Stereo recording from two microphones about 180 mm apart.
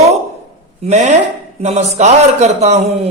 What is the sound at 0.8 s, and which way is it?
A man's voice, 40° right (ahead or behind).